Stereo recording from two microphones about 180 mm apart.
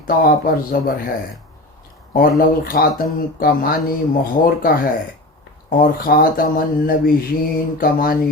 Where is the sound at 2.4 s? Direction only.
55° left (ahead or behind).